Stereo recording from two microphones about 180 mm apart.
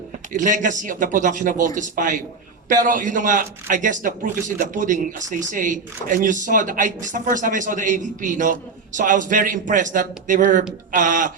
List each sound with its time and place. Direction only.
0.3 s a man's voice: 45° right (ahead or behind)